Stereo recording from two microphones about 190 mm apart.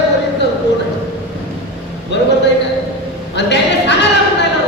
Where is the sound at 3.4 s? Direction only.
65° left (ahead or behind).